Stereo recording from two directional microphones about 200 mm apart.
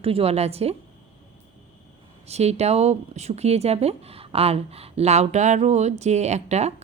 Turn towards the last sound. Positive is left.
turn(degrees=-35)  # may be behind; listen again after turning